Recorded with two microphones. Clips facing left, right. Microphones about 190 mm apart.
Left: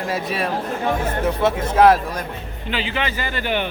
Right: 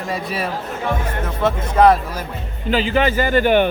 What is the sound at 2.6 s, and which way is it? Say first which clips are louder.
A man's voice: right 8 dB; 40° right (ahead or behind).